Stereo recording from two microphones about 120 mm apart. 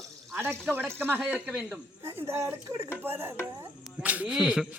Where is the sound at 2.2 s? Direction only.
20° right (ahead or behind); by 4.6 s 5° right (ahead or behind).